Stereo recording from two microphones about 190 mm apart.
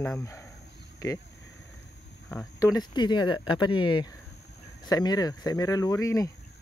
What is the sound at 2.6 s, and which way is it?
Speech, 20° left (ahead or behind).